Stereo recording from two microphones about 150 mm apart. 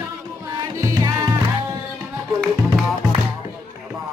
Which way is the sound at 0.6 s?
25° right (ahead or behind).